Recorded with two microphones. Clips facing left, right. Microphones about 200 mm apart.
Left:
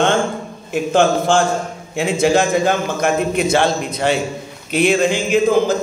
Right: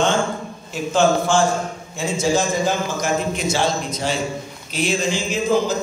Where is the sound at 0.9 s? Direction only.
55° left (ahead or behind).